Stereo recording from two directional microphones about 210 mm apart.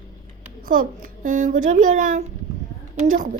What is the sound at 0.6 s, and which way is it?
A woman's voice, 40° right (ahead or behind).